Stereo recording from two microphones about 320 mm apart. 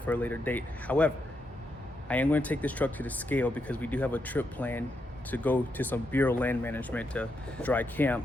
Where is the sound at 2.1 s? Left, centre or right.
Centre.